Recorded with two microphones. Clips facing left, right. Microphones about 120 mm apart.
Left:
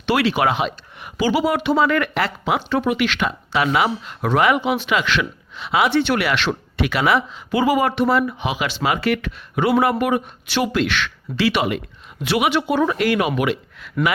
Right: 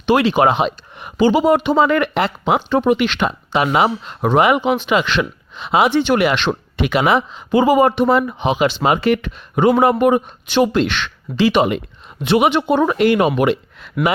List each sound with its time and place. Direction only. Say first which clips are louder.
0.0 s speech: right 5 dB; 20° right (ahead or behind)